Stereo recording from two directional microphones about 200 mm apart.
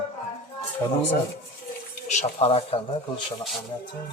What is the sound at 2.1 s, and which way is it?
Speech, 35° left (ahead or behind).